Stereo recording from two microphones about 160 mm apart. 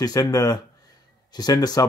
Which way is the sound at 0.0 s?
25° left (ahead or behind).